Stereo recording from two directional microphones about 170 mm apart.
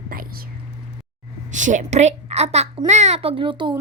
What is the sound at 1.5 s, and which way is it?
A woman's voice, 45° right (ahead or behind).